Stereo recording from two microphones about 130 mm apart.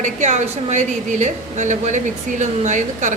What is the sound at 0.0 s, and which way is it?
Speech, 65° right (ahead or behind).